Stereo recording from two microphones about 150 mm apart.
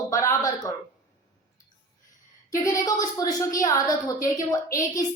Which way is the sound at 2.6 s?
25° left (ahead or behind).